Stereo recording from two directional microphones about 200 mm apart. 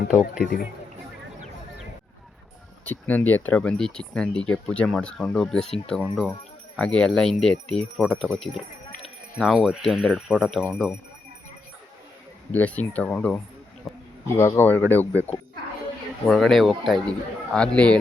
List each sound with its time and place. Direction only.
0.4 s speech: 50° left (ahead or behind)
2.8 s speech: 10° left (ahead or behind)
12.5 s speech: 10° left (ahead or behind)
13.9 s a sound: centre (ahead or behind)
14.3 s speech: 15° left (ahead or behind)
16.2 s speech: centre (ahead or behind)